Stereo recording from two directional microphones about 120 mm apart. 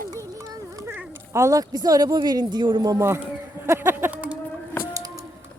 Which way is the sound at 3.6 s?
20° right (ahead or behind).